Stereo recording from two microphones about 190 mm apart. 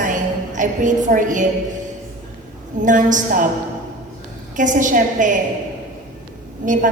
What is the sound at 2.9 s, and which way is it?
Speech, 40° right (ahead or behind).